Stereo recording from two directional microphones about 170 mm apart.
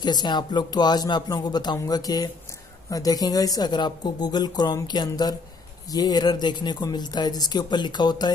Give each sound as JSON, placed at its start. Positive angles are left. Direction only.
{"t": 0.0, "sound": "speech", "side_deg": 25}